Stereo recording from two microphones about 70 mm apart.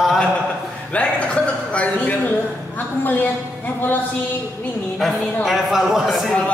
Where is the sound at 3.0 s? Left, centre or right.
Left.